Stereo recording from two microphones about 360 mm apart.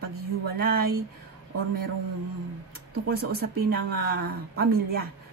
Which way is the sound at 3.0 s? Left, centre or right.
Right.